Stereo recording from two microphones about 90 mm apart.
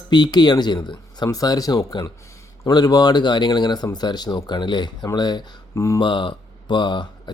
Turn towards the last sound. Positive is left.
turn(degrees=60)  # may be behind; listen again after turning